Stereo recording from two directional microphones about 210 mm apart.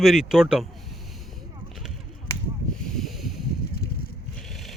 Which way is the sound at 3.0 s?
Centre (ahead or behind).